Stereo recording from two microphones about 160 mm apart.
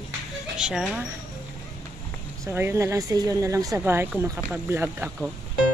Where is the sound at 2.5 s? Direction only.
15° right (ahead or behind).